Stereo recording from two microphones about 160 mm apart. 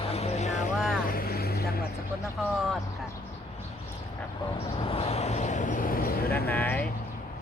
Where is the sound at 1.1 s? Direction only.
70° left (ahead or behind).